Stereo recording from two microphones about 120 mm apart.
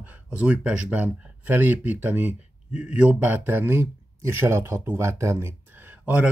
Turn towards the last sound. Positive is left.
turn(degrees=-15)  # may be behind; listen again after turning